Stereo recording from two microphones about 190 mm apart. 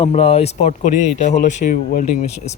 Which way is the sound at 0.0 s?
35° left (ahead or behind).